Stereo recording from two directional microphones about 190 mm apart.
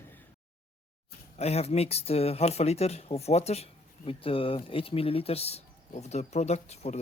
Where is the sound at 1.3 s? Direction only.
35° left (ahead or behind).